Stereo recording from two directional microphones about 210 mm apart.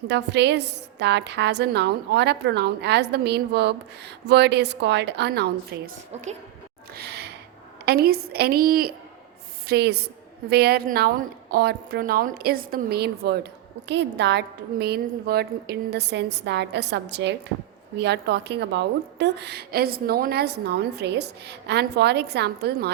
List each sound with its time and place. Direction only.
0.1 s a woman's voice: 55° right (ahead or behind)
6.9 s gasp: 50° right (ahead or behind)
7.9 s a woman's voice: 45° right (ahead or behind)